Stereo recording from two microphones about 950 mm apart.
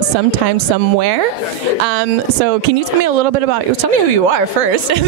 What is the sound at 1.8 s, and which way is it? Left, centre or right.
Speech, right.